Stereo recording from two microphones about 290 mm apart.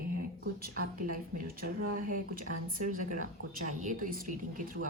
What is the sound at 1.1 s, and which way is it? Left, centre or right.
A woman's voice, right.